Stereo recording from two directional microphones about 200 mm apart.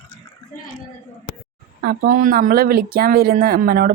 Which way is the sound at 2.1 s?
45° right (ahead or behind).